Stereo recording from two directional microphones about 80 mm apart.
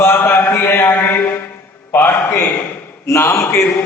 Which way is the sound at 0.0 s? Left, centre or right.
Left.